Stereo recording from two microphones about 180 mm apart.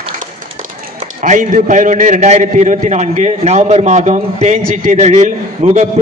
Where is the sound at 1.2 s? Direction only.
45° right (ahead or behind).